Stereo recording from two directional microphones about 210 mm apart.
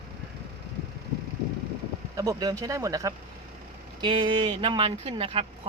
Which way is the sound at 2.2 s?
15° right (ahead or behind).